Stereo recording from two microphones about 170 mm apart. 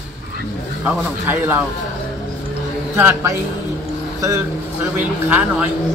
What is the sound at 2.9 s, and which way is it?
A man's voice, 15° right (ahead or behind).